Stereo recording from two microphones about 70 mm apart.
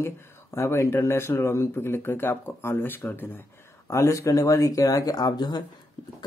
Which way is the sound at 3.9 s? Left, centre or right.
Left.